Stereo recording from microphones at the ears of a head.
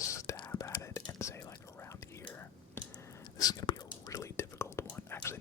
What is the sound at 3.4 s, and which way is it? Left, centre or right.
Whispering, left.